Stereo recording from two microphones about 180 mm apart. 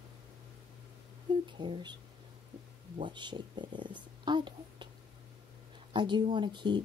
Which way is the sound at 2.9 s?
25° right (ahead or behind).